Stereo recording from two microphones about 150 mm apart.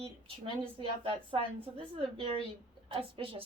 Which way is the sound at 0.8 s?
35° right (ahead or behind).